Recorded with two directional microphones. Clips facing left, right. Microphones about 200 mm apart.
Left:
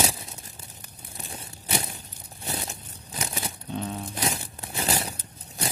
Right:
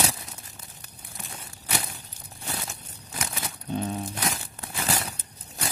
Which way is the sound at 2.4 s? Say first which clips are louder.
Left 2 dB; 25° left (ahead or behind).